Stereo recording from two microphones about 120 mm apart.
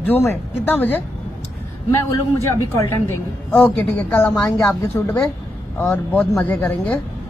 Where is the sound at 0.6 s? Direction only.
15° left (ahead or behind).